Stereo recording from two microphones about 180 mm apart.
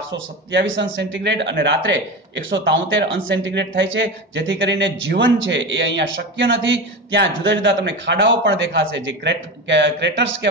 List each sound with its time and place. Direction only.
0.1 s speech: 85° right